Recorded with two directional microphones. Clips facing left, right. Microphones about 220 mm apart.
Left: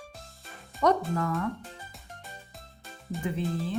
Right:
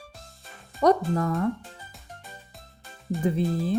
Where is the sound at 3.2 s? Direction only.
35° right (ahead or behind).